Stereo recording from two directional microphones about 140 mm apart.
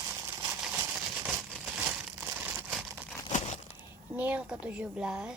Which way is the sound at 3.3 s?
55° left (ahead or behind).